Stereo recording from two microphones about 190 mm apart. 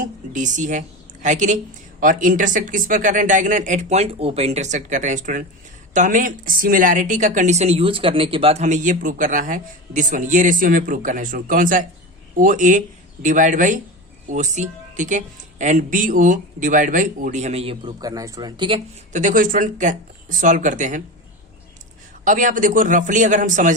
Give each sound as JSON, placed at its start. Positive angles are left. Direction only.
{"t": 0.0, "sound": "a woman's voice", "side_deg": -40}
{"t": 19.1, "sound": "speech", "side_deg": -45}
{"t": 22.2, "sound": "speech", "side_deg": -45}